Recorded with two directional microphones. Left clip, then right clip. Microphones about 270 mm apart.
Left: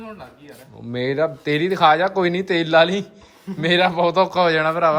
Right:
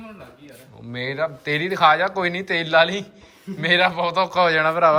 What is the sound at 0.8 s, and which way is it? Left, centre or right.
Speech, centre.